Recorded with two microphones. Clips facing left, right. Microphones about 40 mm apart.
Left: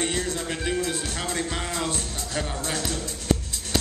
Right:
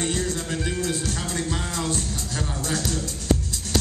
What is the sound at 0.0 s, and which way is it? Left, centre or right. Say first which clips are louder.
Music: right 1 dB; left.